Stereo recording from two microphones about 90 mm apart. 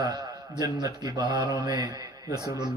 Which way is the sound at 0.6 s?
45° right (ahead or behind).